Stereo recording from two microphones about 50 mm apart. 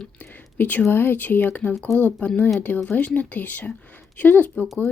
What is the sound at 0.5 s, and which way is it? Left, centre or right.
Speech, left.